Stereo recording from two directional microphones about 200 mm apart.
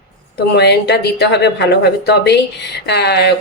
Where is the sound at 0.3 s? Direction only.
55° left (ahead or behind).